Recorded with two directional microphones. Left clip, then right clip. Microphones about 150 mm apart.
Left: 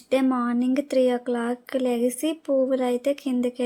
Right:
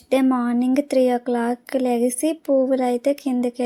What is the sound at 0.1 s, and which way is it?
Speech, 25° right (ahead or behind).